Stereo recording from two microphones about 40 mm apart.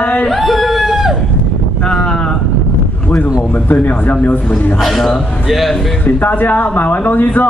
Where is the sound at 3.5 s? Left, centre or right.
Left.